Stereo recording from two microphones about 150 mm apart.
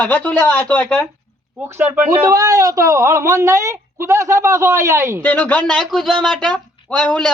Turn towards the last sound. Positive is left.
turn(degrees=5)  # may be behind; listen again after turning